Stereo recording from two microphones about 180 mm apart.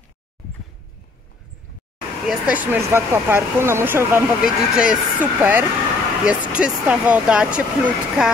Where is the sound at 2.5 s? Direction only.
10° right (ahead or behind).